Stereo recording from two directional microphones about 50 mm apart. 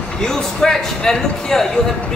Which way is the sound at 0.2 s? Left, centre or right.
Centre.